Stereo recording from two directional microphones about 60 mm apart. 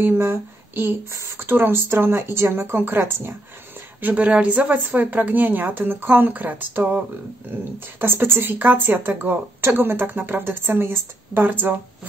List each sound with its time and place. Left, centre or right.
0.0 s speech: right
4.0 s a woman's voice: right
8.0 s speech: right